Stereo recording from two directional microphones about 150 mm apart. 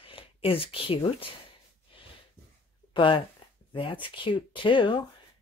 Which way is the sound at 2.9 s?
35° left (ahead or behind).